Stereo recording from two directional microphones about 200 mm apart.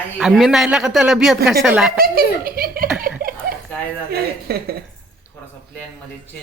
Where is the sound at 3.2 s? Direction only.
45° right (ahead or behind).